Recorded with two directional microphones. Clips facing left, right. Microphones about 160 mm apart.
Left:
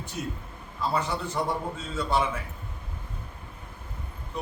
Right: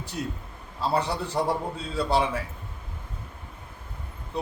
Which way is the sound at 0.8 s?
35° right (ahead or behind).